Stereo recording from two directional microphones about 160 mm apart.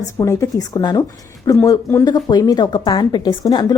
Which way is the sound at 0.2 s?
20° left (ahead or behind).